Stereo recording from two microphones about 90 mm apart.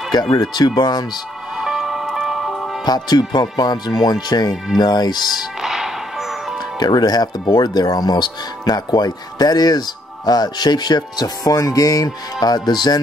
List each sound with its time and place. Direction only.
0.4 s speech: 50° left (ahead or behind)
1.6 s music: 5° right (ahead or behind)
2.8 s speech: 50° left (ahead or behind)
5.6 s music: 5° right (ahead or behind)
6.8 s speech: 50° left (ahead or behind)